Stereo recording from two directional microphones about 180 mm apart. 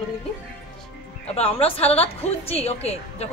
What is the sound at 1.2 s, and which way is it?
A woman's voice, 35° left (ahead or behind).